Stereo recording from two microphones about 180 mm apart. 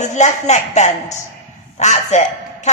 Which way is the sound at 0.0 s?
40° left (ahead or behind).